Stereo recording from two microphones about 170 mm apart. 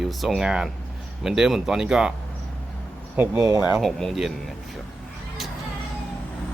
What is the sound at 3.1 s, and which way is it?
Speech, 10° right (ahead or behind).